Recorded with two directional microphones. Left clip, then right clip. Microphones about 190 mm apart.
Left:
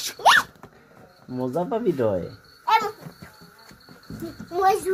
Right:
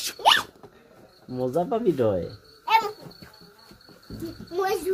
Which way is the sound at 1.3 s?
15° right (ahead or behind).